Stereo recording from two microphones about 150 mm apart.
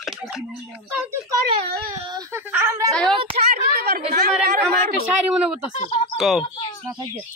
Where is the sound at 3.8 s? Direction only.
90° right.